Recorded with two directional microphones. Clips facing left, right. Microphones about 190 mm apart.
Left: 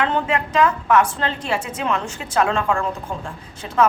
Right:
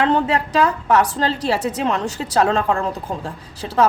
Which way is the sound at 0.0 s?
35° right (ahead or behind).